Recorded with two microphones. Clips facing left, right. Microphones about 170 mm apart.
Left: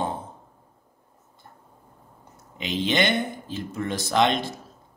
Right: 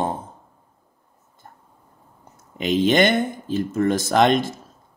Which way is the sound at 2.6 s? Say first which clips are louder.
Right 7 dB; 50° right (ahead or behind).